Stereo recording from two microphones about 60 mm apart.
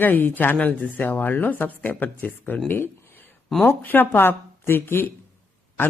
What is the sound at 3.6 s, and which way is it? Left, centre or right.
Speech, left.